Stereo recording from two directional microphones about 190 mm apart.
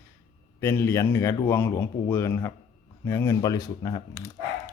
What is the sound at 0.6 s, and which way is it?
Speech, 15° left (ahead or behind).